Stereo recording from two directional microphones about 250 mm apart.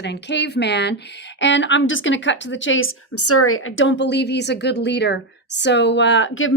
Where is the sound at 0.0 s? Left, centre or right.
Left.